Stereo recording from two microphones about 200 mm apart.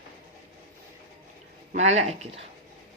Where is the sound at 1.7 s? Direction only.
35° right (ahead or behind).